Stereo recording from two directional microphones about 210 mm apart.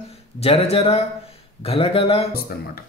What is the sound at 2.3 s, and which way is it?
Speech, 45° left (ahead or behind).